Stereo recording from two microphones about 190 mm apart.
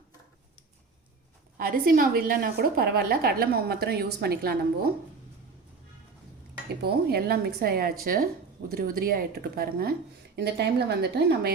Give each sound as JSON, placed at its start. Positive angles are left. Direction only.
{"t": 1.5, "sound": "a woman's voice", "side_deg": -50}
{"t": 6.7, "sound": "a woman's voice", "side_deg": -55}